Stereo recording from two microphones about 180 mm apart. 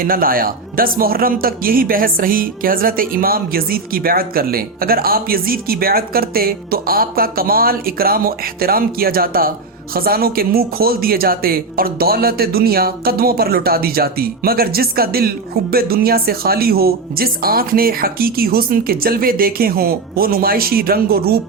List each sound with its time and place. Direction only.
0.0 s speech: 55° right (ahead or behind)